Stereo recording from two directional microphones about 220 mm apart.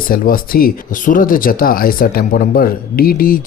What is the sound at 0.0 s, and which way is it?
Speech, 40° left (ahead or behind).